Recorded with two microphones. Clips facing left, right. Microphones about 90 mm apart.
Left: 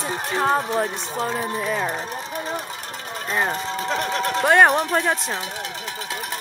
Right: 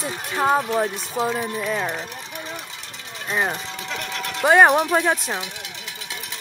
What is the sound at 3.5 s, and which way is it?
Speech, 40° left (ahead or behind).